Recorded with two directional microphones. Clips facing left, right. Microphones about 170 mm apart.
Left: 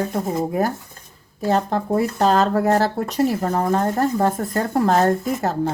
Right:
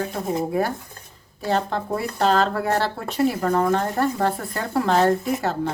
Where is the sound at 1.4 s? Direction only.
40° left (ahead or behind).